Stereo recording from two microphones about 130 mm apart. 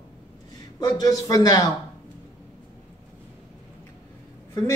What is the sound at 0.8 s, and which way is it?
Speech, 30° left (ahead or behind).